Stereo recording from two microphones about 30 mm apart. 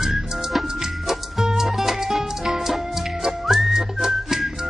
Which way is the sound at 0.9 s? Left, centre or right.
Centre.